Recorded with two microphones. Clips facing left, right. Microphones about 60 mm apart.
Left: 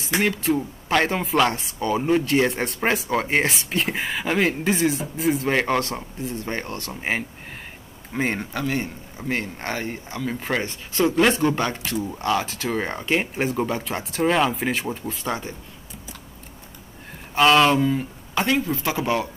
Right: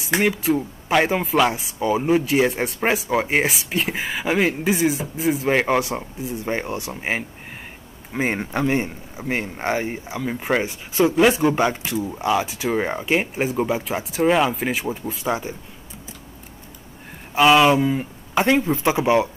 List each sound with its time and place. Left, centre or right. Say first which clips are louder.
0.2 s speech: right 1 dB; centre
8.5 s speech: right 4 dB; right
17.3 s speech: right 2 dB; centre